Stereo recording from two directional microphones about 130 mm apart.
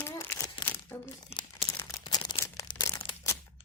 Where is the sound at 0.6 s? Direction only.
20° left (ahead or behind).